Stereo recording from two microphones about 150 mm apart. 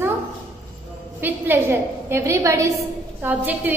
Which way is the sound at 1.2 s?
15° right (ahead or behind).